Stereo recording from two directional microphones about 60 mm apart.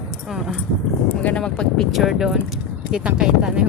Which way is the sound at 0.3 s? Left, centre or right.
Centre.